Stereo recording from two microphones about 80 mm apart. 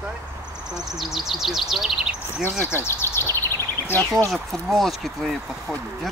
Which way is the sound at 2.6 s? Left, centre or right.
Left.